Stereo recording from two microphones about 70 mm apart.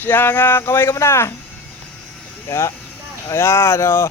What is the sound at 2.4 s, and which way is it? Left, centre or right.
Speech, left.